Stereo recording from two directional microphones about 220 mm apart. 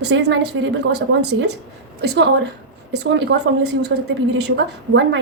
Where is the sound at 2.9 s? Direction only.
50° right (ahead or behind).